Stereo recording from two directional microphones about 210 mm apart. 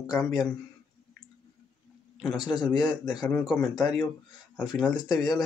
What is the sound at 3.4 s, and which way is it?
Speech, centre (ahead or behind).